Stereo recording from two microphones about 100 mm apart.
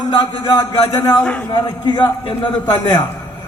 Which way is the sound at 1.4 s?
45° left (ahead or behind).